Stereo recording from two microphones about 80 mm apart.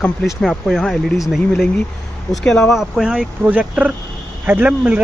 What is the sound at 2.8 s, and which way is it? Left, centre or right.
Speech, centre.